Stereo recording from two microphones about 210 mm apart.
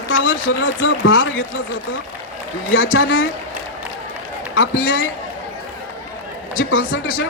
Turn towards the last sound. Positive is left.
turn(degrees=75)  # may be behind; listen again after turning